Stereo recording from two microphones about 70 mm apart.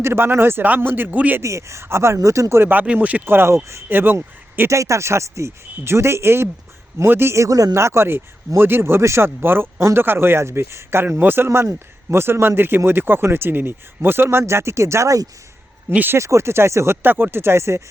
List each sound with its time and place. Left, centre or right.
0.0 s speech: right
1.4 s speech: right
2.6 s speech: right
3.2 s speech: right
3.8 s speech: right
4.7 s speech: right
7.4 s speech: right
7.8 s speech: right
15.9 s speech: right
16.1 s speech: right